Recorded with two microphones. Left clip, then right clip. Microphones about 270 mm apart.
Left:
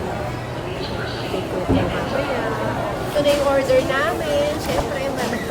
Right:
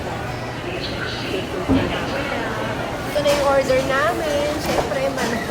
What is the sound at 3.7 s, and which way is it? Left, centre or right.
Speech, centre.